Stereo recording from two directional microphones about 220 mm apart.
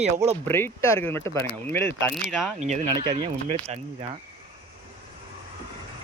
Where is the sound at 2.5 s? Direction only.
30° right (ahead or behind).